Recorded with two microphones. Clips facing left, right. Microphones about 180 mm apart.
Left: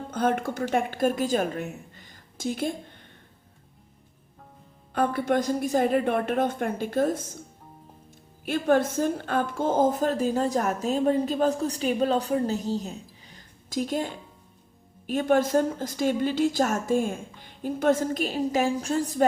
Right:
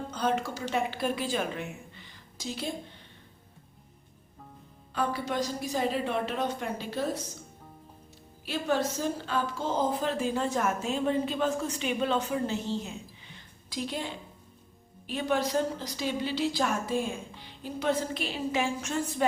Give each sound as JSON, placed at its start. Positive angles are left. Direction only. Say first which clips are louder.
{"t": 0.1, "sound": "a woman's voice", "louder": "left 5 dB", "side_deg": 55}
{"t": 4.9, "sound": "a woman's voice", "louder": "left 7 dB", "side_deg": 55}
{"t": 8.4, "sound": "a woman's voice", "louder": "left 6 dB", "side_deg": 50}
{"t": 13.2, "sound": "a sound", "louder": "left 2 dB", "side_deg": 45}
{"t": 15.0, "sound": "a woman's voice", "louder": "left 6 dB", "side_deg": 50}